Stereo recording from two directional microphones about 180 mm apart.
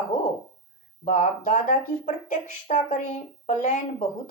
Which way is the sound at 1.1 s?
40° left (ahead or behind).